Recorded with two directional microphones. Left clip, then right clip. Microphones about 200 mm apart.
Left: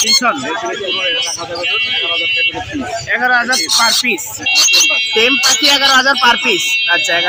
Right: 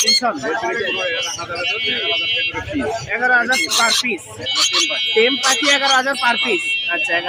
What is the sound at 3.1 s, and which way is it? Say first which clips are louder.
Speech: left 3 dB; 20° left (ahead or behind).